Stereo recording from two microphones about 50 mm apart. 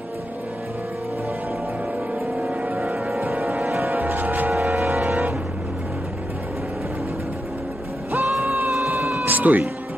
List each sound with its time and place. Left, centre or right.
2.8 s music: centre
3.9 s music: right
8.1 s music: right
8.8 s cat: right
9.2 s cat: right